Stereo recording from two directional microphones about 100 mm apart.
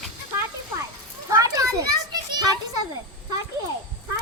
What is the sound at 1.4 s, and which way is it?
Children playing, 35° right (ahead or behind).